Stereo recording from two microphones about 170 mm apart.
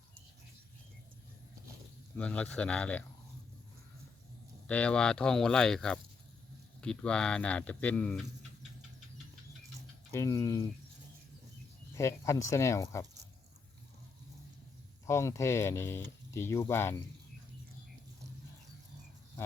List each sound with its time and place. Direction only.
2.1 s speech: 5° left (ahead or behind)
4.6 s speech: 5° left (ahead or behind)
10.1 s speech: 15° left (ahead or behind)
11.9 s speech: 15° left (ahead or behind)
15.0 s speech: 15° left (ahead or behind)